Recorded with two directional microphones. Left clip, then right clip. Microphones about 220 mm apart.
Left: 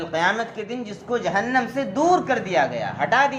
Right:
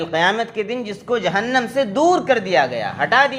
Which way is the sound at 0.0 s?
45° right (ahead or behind).